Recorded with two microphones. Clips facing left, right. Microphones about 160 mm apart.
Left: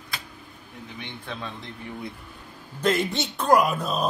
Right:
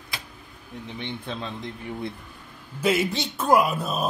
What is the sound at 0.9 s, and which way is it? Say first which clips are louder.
Speech: right 4 dB; 20° right (ahead or behind).